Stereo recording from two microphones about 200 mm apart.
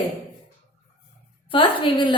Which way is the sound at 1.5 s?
25° left (ahead or behind).